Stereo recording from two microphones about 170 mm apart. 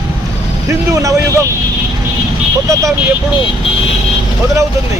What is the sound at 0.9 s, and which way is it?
Speech, 20° right (ahead or behind).